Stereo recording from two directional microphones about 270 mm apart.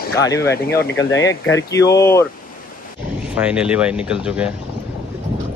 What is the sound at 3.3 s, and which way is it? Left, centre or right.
Speech, centre.